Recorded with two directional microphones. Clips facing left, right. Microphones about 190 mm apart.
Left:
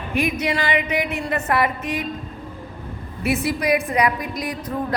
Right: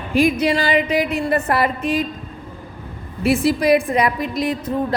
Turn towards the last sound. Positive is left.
turn(degrees=-25)  # may be behind; listen again after turning